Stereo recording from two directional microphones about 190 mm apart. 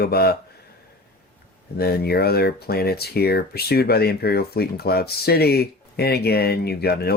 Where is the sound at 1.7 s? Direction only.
55° left (ahead or behind).